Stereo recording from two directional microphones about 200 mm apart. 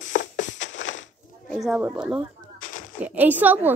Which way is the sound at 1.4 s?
Centre (ahead or behind).